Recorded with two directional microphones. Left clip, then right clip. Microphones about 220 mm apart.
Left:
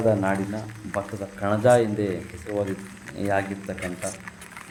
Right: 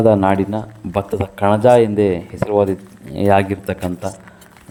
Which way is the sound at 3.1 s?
35° right (ahead or behind).